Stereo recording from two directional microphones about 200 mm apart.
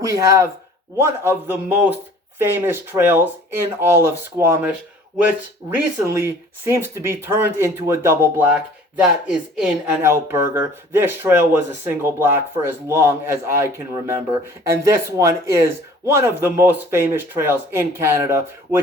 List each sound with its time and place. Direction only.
0.1 s speech: 15° right (ahead or behind)
5.7 s speech: 10° right (ahead or behind)